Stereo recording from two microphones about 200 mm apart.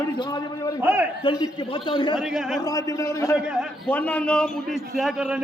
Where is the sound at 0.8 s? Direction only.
10° right (ahead or behind).